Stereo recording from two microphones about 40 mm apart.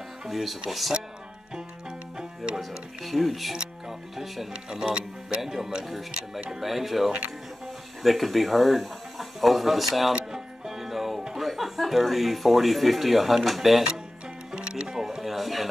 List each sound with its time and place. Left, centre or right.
0.3 s speech: centre
2.1 s music: centre
2.6 s speech: centre
4.6 s speech: centre
5.9 s speech: centre
10.3 s music: centre
14.6 s music: right
15.0 s speech: centre